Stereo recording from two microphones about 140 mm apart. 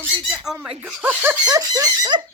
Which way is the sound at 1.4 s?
25° right (ahead or behind).